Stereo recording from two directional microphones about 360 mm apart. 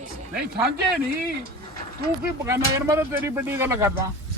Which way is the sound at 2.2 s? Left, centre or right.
Centre.